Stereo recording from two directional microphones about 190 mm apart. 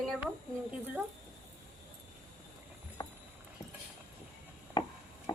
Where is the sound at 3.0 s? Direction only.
20° left (ahead or behind).